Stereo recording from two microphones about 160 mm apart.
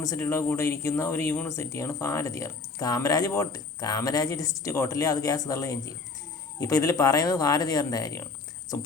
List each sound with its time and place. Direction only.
0.0 s speech: 20° left (ahead or behind)